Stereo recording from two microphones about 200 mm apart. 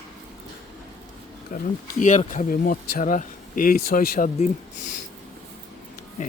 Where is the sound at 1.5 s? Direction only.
40° left (ahead or behind).